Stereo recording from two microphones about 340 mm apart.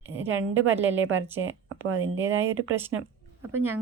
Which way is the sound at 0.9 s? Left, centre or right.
Right.